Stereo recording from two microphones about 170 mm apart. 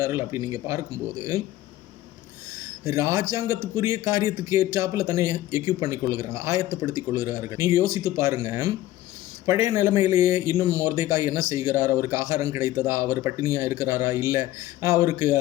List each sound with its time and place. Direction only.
0.0 s speech: 15° right (ahead or behind)
2.8 s speech: 20° right (ahead or behind)